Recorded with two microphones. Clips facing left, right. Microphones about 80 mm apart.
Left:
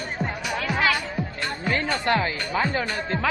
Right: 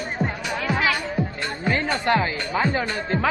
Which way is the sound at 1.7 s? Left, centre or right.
Right.